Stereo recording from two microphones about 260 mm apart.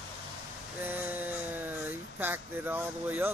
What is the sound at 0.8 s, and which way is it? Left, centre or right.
Speech, centre.